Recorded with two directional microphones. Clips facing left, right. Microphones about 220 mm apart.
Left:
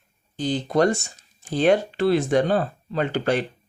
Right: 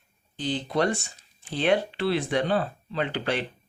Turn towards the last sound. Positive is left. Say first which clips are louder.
# left 5 dB
turn(degrees=45)  # may be behind; listen again after turning